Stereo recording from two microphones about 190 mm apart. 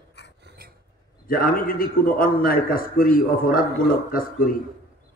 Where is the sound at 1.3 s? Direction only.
50° left (ahead or behind).